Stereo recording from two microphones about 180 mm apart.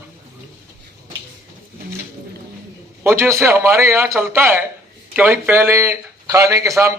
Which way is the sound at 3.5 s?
15° right (ahead or behind).